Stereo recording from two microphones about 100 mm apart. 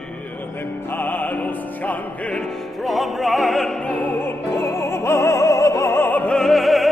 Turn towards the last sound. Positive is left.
turn(degrees=0)  # may be behind; listen again after turning